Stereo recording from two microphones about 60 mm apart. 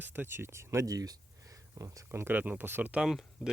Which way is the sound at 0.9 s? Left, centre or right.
Right.